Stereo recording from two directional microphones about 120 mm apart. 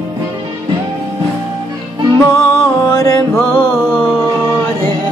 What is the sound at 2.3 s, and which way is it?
Music, 25° left (ahead or behind).